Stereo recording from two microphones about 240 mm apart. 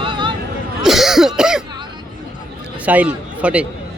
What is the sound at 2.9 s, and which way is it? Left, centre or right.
Speech, centre.